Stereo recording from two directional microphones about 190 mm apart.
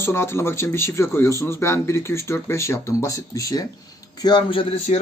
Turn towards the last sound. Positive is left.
turn(degrees=30)  # may be behind; listen again after turning